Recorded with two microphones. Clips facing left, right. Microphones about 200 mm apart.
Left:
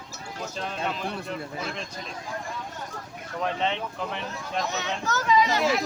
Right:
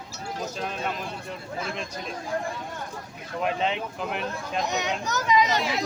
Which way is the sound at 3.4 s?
10° right (ahead or behind).